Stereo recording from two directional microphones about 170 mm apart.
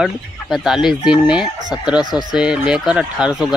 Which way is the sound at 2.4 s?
5° right (ahead or behind).